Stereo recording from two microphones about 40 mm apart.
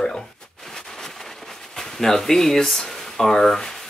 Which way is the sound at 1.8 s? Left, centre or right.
Centre.